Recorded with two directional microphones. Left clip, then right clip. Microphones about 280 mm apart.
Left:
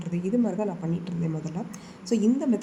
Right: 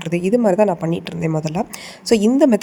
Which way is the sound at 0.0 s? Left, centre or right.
Right.